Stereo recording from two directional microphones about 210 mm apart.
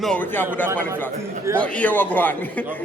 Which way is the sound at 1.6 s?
5° left (ahead or behind).